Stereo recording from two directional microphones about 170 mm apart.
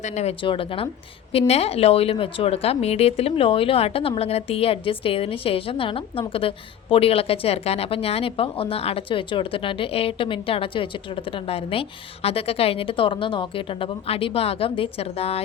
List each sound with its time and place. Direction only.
0.0 s speech: 40° left (ahead or behind)